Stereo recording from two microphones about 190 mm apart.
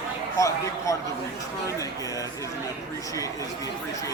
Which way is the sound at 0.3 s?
15° left (ahead or behind).